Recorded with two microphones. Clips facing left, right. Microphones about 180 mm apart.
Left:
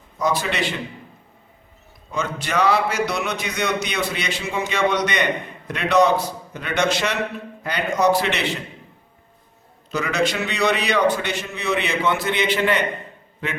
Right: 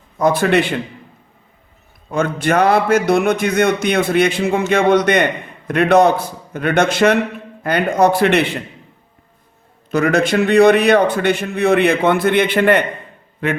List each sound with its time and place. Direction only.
0.2 s a man's voice: 55° right (ahead or behind)
2.0 s a man's voice: 55° right (ahead or behind)
9.9 s a man's voice: 55° right (ahead or behind)